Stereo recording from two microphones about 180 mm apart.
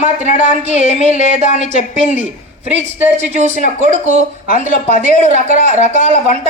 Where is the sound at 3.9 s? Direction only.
40° right (ahead or behind).